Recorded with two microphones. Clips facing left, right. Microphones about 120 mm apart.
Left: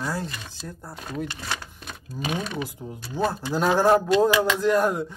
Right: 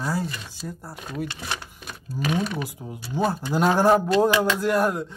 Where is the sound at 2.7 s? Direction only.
5° right (ahead or behind).